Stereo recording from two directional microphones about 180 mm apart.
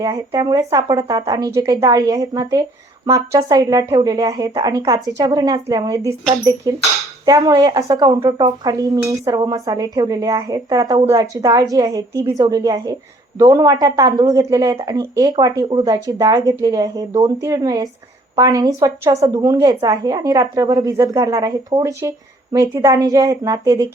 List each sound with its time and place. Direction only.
0.0 s speech: 20° right (ahead or behind)